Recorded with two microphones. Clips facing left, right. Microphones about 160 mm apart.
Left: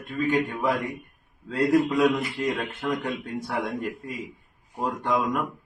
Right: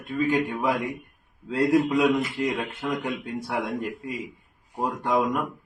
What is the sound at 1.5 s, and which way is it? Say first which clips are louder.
Speech: right 1 dB; 20° right (ahead or behind).